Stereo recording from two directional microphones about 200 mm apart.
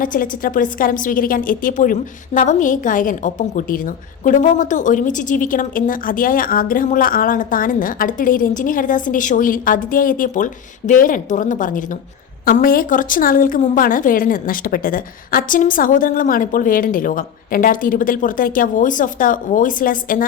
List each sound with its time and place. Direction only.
0.0 s a woman's voice: 45° left (ahead or behind)